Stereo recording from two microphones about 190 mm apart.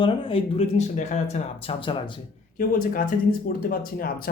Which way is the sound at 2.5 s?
45° left (ahead or behind).